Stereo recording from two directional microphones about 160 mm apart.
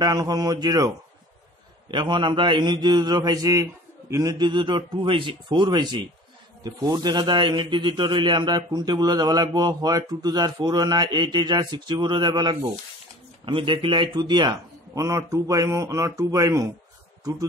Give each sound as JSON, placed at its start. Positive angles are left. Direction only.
{"t": 0.0, "sound": "a man's voice", "side_deg": -25}